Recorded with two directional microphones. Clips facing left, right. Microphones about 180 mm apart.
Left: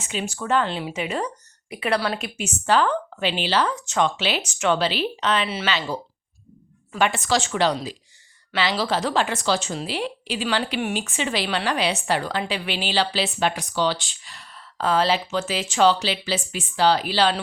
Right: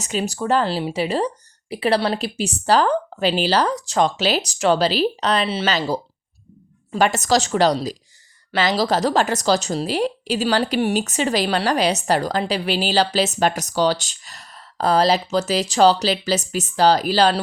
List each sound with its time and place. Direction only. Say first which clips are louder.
0.0 s a woman's voice: right 5 dB; 40° right (ahead or behind)